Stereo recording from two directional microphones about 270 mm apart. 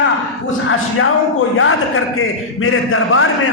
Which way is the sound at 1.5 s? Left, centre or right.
Left.